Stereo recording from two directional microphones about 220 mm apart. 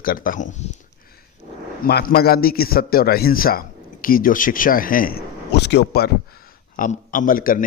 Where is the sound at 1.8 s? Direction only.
45° left (ahead or behind).